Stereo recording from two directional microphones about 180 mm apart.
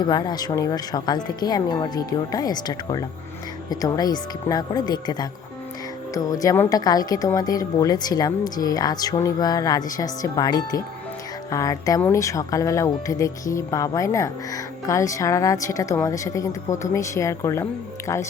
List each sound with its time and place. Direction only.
0.0 s a woman's voice: 25° left (ahead or behind)